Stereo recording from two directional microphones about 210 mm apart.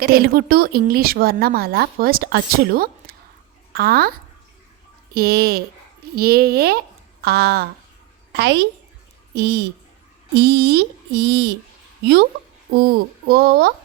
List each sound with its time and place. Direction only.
0.0 s a child's voice: 45° right (ahead or behind)
12.8 s speech: 45° right (ahead or behind)